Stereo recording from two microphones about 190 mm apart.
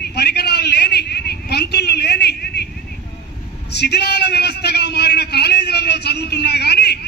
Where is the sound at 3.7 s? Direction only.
60° left (ahead or behind).